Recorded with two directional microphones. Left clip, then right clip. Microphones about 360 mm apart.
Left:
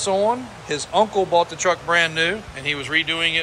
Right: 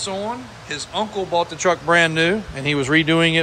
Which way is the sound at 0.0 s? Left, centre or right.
Centre.